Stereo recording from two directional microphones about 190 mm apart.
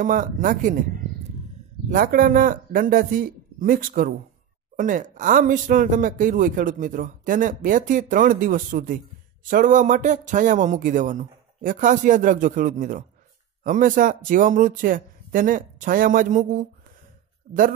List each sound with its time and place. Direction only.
0.0 s speech: 45° right (ahead or behind)
1.9 s speech: 45° right (ahead or behind)